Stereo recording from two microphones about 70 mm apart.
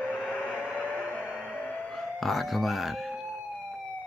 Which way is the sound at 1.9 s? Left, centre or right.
Centre.